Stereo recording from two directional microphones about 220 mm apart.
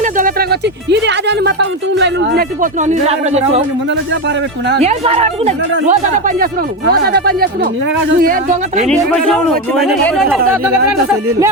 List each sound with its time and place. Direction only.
0.0 s speech: 40° right (ahead or behind)
2.6 s speech: 35° right (ahead or behind)
4.8 s a woman's voice: 30° right (ahead or behind)
8.8 s speech: centre (ahead or behind)